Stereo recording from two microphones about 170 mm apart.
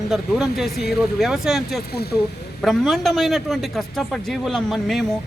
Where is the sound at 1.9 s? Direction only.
70° left (ahead or behind).